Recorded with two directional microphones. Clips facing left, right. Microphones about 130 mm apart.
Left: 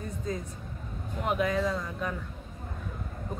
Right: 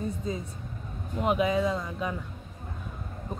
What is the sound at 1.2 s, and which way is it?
Speech, 20° right (ahead or behind).